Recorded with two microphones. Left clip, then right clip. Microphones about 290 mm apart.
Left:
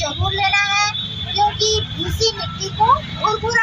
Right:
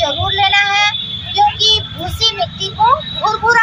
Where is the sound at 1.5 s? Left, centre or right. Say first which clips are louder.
Right 6 dB; centre.